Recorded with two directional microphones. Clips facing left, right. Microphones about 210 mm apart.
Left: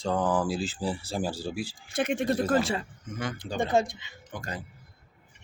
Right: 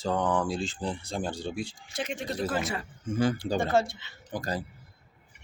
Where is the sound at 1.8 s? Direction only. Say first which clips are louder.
Left 7 dB; 55° left (ahead or behind).